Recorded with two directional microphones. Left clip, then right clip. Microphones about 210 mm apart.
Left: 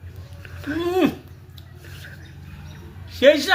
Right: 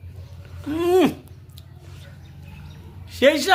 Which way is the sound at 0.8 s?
55° right (ahead or behind).